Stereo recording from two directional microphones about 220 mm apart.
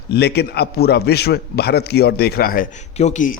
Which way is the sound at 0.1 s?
50° left (ahead or behind).